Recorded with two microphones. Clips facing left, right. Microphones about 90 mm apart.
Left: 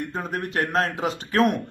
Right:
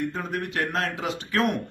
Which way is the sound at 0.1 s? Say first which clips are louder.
Left 2 dB; 35° left (ahead or behind).